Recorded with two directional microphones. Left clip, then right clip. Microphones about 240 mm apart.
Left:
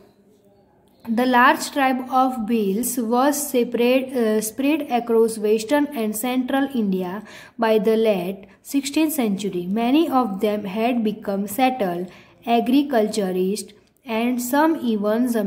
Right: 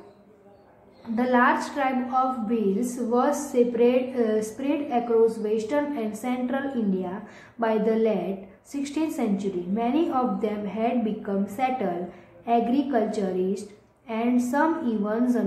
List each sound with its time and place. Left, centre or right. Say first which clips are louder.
1.1 s a woman's voice: left 5 dB; left